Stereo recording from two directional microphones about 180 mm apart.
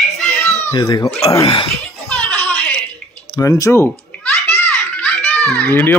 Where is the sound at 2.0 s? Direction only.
5° left (ahead or behind).